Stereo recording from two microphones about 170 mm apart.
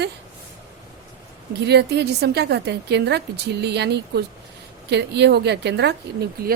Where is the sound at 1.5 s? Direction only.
75° right (ahead or behind).